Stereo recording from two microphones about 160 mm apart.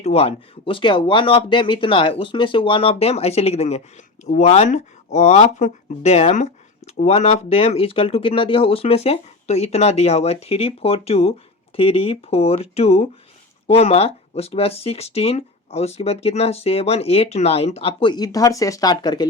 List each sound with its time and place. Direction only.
0.0 s speech: 40° left (ahead or behind)